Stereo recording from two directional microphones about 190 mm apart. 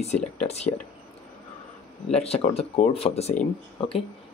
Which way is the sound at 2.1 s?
30° left (ahead or behind).